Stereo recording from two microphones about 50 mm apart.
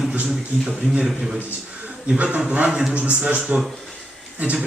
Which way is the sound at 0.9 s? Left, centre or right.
Centre.